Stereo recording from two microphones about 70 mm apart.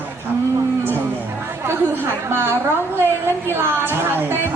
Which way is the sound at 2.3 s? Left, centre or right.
Right.